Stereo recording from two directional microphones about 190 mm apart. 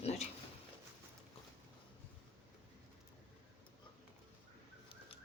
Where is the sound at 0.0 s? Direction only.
35° left (ahead or behind).